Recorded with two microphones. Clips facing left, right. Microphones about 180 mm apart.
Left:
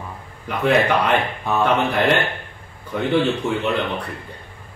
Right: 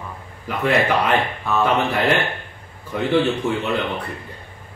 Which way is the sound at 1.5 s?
15° left (ahead or behind).